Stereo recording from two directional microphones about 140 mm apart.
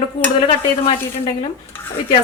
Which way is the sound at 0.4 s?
40° left (ahead or behind).